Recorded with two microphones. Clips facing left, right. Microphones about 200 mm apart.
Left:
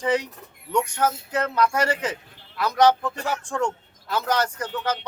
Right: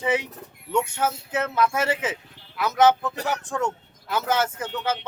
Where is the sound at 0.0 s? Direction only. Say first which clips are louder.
Left 1 dB; 5° right (ahead or behind).